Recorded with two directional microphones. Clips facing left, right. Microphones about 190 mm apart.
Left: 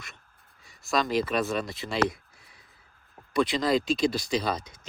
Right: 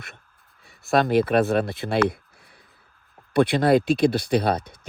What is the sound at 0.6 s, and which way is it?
Speech, 60° right (ahead or behind).